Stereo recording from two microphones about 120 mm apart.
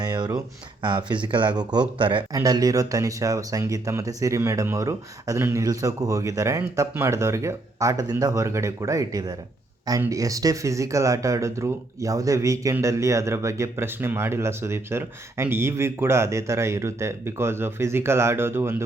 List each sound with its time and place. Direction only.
0.0 s a sound: 35° right (ahead or behind)
0.8 s speech: 40° right (ahead or behind)
2.3 s speech: 30° right (ahead or behind)